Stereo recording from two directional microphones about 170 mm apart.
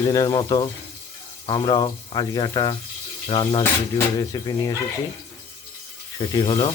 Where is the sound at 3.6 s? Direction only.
15° left (ahead or behind).